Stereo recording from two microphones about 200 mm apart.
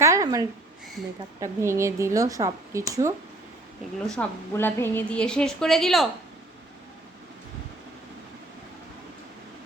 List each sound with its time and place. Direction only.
0.0 s a sound: 15° right (ahead or behind)
1.4 s speech: 15° right (ahead or behind)
4.0 s a woman's voice: 5° left (ahead or behind)